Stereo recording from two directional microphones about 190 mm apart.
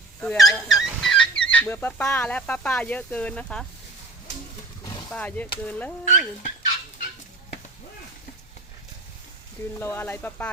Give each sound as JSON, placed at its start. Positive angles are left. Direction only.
{"t": 0.2, "sound": "speech", "side_deg": 5}
{"t": 5.1, "sound": "speech", "side_deg": 10}
{"t": 6.1, "sound": "speech", "side_deg": 40}
{"t": 9.7, "sound": "speech", "side_deg": 10}